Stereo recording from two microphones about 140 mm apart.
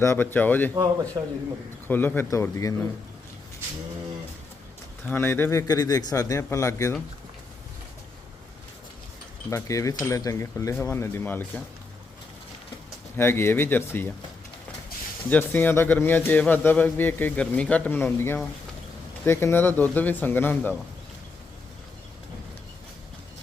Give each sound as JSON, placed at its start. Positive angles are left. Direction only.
{"t": 0.0, "sound": "a man's voice", "side_deg": 15}
{"t": 1.2, "sound": "a man's voice", "side_deg": -25}
{"t": 1.9, "sound": "a man's voice", "side_deg": 15}
{"t": 5.0, "sound": "a man's voice", "side_deg": 15}
{"t": 9.5, "sound": "a man's voice", "side_deg": 20}
{"t": 13.1, "sound": "a man's voice", "side_deg": 15}
{"t": 15.3, "sound": "a man's voice", "side_deg": 15}